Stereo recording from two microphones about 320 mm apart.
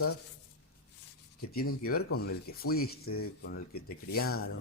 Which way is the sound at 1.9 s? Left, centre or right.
Left.